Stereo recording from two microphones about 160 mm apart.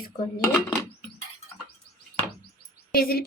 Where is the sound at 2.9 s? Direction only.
70° left (ahead or behind).